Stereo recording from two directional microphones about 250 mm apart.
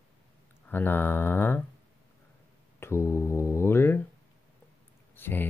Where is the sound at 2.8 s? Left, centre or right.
Centre.